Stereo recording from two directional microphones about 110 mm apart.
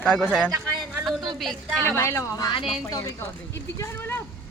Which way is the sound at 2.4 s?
50° left (ahead or behind).